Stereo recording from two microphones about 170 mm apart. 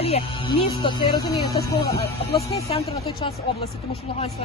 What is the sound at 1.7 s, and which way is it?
Speech, 65° left (ahead or behind).